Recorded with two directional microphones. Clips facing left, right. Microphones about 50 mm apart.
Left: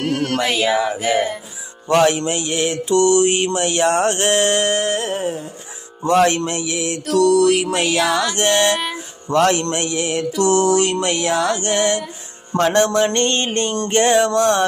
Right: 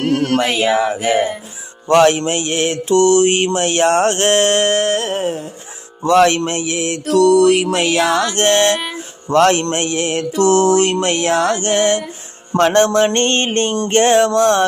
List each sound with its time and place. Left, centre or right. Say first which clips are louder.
0.0 s speech: right 4 dB; centre
1.9 s mantra: right 4 dB; right
7.9 s music: right 3 dB; centre
8.4 s mantra: right 3 dB; right
12.5 s music: right 3 dB; right
13.1 s a sound: right 3 dB; right